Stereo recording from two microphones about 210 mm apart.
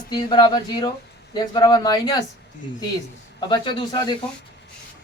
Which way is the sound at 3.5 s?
20° left (ahead or behind).